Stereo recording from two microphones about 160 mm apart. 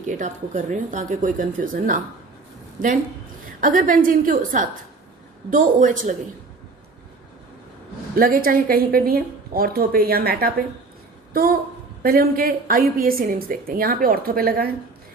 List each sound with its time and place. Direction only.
0.0 s a woman's voice: 50° right (ahead or behind)
8.1 s a woman's voice: 65° right (ahead or behind)
12.0 s a woman's voice: 70° right (ahead or behind)